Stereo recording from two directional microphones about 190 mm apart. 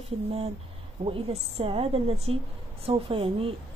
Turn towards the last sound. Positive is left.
turn(degrees=-30)  # may be behind; listen again after turning